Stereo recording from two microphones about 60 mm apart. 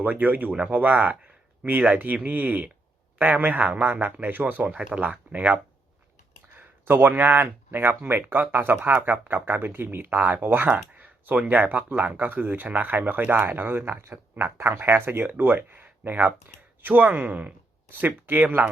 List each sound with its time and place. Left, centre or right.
0.0 s a man's voice: right
4.8 s a man's voice: centre
6.6 s speech: right